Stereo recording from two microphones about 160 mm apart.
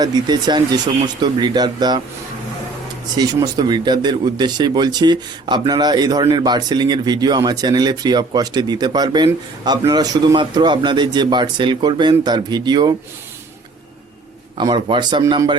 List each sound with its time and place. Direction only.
0.0 s speech: 25° right (ahead or behind)
3.2 s speech: 25° right (ahead or behind)
14.6 s speech: 30° right (ahead or behind)